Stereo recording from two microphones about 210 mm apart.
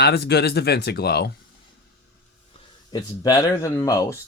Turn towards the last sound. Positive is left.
turn(degrees=15)  # may be behind; listen again after turning